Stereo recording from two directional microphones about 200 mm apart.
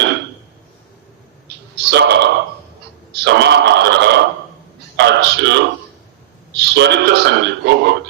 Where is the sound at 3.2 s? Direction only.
60° right (ahead or behind).